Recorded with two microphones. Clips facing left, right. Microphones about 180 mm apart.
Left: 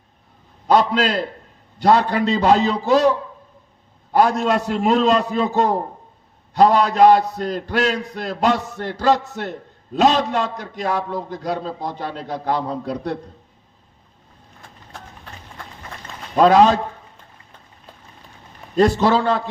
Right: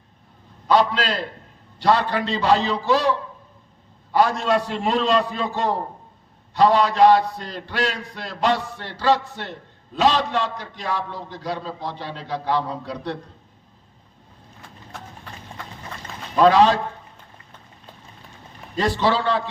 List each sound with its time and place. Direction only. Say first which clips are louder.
0.7 s a man's voice: left 3 dB; 45° left (ahead or behind)
16.3 s a man's voice: left 2 dB; 50° left (ahead or behind)
18.8 s a man's voice: left 5 dB; 50° left (ahead or behind)